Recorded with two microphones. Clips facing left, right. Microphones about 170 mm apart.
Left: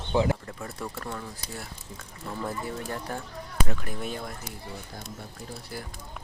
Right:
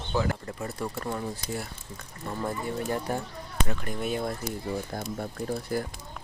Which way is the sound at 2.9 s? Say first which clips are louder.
Right 5 dB; 20° right (ahead or behind).